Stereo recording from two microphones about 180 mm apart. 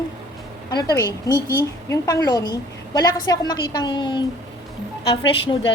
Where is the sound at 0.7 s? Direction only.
20° left (ahead or behind).